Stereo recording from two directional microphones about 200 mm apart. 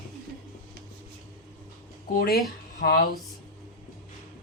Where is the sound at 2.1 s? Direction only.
50° left (ahead or behind).